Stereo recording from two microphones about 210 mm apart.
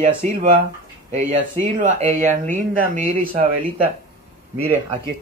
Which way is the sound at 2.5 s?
35° right (ahead or behind).